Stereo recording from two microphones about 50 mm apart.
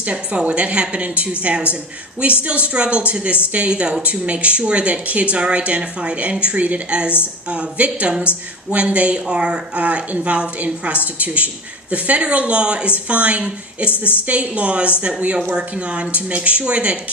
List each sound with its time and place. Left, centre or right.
0.0 s a woman's voice: right
13.9 s a woman's voice: left
14.3 s a woman's voice: right